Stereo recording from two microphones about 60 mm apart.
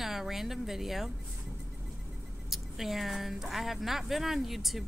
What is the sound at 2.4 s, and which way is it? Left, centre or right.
Speech, centre.